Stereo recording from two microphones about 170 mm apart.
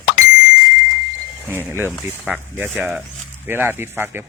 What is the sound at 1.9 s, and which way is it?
Speech, centre (ahead or behind).